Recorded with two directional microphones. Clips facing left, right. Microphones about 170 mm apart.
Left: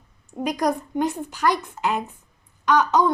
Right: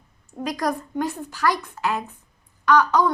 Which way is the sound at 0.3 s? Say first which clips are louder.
Left 2 dB; 20° left (ahead or behind).